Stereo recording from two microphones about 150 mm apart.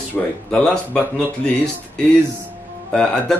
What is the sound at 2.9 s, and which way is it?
Speech, 5° left (ahead or behind).